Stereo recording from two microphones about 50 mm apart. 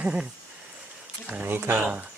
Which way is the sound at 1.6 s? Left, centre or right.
Right.